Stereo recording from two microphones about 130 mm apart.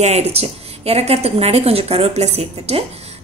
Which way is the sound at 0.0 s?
55° right (ahead or behind).